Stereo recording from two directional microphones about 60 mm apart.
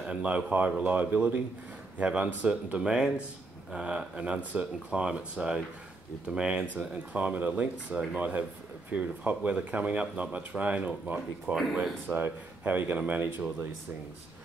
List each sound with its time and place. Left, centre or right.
0.0 s speech: centre